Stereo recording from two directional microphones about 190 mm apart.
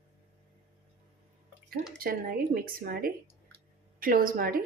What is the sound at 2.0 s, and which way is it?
A woman's voice, 50° right (ahead or behind).